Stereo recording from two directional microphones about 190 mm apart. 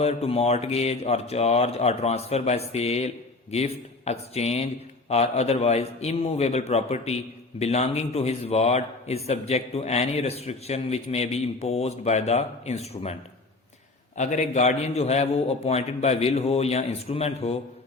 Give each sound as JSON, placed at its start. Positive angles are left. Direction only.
{"t": 0.0, "sound": "a man's voice", "side_deg": 35}
{"t": 14.2, "sound": "a man's voice", "side_deg": 40}